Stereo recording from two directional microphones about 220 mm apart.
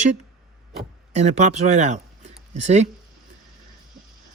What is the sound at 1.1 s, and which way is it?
Speech, 30° right (ahead or behind).